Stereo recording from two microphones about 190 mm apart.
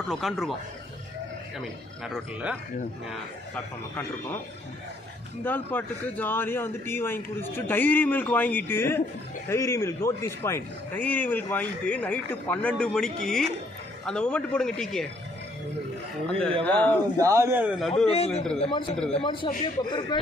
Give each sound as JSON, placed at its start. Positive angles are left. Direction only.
{"t": 0.1, "sound": "a man's voice", "side_deg": 0}
{"t": 1.6, "sound": "a man's voice", "side_deg": 0}
{"t": 3.5, "sound": "speech", "side_deg": 10}
{"t": 5.4, "sound": "a man's voice", "side_deg": 10}
{"t": 16.3, "sound": "a man's voice", "side_deg": 5}
{"t": 17.2, "sound": "speech", "side_deg": -15}
{"t": 18.1, "sound": "a man's voice", "side_deg": 35}